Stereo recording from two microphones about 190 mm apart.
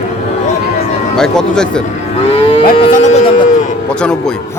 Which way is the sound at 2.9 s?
35° left (ahead or behind).